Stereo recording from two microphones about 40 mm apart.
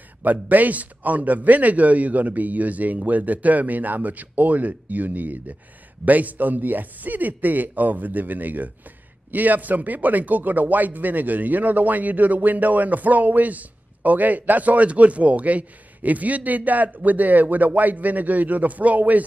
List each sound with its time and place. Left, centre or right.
0.2 s a man's voice: right